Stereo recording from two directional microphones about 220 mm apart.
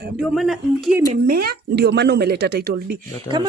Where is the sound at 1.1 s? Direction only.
40° right (ahead or behind).